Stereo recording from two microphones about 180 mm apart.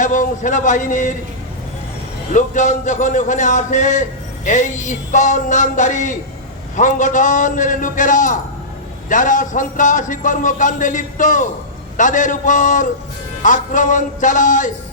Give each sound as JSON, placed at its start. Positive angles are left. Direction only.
{"t": 0.0, "sound": "a man's voice", "side_deg": 45}
{"t": 2.3, "sound": "a man's voice", "side_deg": 45}